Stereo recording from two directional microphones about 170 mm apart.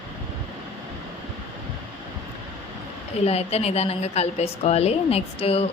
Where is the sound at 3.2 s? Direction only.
40° left (ahead or behind).